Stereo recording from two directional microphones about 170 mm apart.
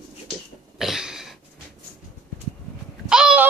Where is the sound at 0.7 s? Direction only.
Centre (ahead or behind).